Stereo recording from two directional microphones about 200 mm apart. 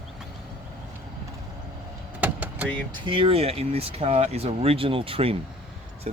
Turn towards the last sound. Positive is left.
turn(degrees=-35)  # may be behind; listen again after turning